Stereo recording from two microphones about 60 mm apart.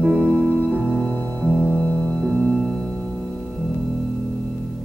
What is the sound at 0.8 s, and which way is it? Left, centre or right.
Music, left.